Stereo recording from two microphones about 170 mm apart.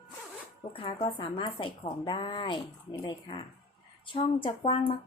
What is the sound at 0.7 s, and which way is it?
Speech, 30° left (ahead or behind).